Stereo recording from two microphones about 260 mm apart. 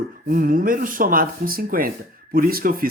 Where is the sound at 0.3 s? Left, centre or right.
Right.